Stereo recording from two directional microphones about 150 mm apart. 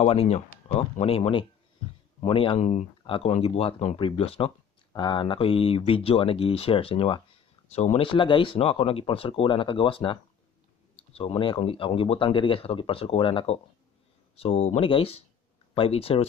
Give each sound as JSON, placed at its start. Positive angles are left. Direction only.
{"t": 0.0, "sound": "speech", "side_deg": 45}
{"t": 2.6, "sound": "speech", "side_deg": 50}
{"t": 11.1, "sound": "speech", "side_deg": 35}